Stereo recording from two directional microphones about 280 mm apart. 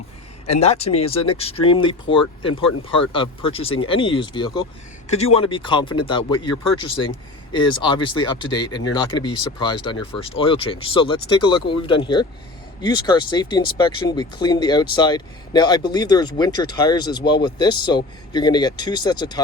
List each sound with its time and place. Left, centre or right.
0.4 s speech: left